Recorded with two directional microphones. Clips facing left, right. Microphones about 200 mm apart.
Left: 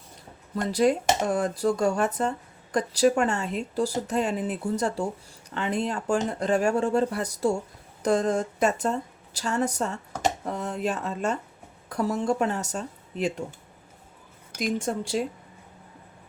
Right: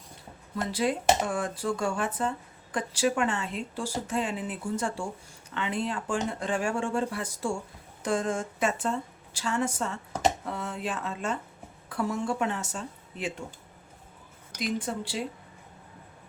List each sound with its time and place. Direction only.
0.7 s a woman's voice: 40° left (ahead or behind)
14.6 s a woman's voice: 45° left (ahead or behind)